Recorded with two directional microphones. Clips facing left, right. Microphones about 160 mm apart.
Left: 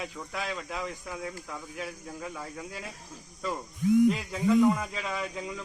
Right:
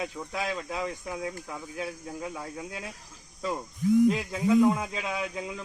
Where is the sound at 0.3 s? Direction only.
25° right (ahead or behind).